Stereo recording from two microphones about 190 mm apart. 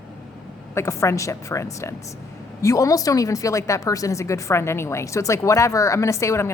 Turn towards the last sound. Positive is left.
turn(degrees=15)  # may be behind; listen again after turning